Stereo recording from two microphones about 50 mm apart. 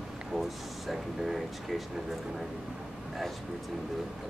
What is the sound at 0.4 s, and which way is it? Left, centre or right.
Speech, centre.